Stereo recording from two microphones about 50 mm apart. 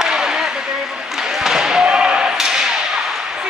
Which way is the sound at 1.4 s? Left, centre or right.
Centre.